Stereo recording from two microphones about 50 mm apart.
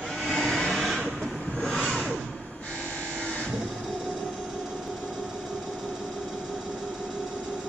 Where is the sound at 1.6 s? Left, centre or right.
Centre.